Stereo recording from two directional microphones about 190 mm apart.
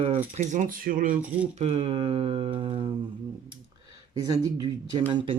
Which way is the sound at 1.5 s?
35° right (ahead or behind).